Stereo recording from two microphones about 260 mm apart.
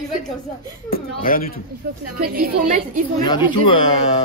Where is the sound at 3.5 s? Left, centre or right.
Centre.